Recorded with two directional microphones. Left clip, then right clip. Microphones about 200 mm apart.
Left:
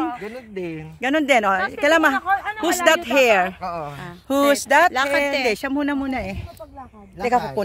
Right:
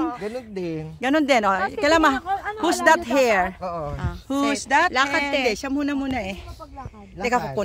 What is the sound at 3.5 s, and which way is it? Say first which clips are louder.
Speech: left 1 dB; 40° right (ahead or behind).